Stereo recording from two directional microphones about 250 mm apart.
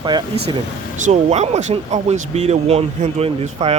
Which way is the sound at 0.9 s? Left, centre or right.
Right.